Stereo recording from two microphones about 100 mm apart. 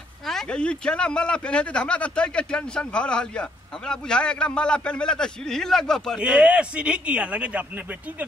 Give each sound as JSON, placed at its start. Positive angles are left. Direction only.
{"t": 0.3, "sound": "speech", "side_deg": 5}
{"t": 6.1, "sound": "speech", "side_deg": -5}